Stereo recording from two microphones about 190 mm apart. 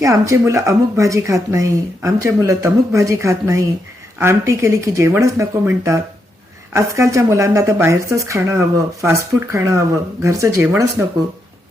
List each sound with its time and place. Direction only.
0.0 s speech: 15° right (ahead or behind)